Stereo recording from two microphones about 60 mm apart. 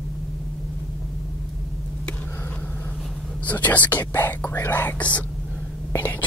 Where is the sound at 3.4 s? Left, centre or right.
Left.